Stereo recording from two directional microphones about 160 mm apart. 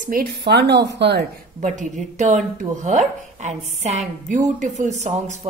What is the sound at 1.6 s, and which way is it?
Speech, 50° right (ahead or behind).